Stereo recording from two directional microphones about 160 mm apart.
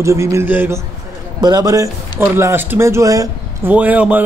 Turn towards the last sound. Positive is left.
turn(degrees=-10)  # may be behind; listen again after turning